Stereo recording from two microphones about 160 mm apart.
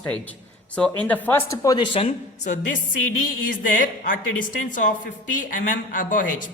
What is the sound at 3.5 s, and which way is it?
Speech, 60° left (ahead or behind).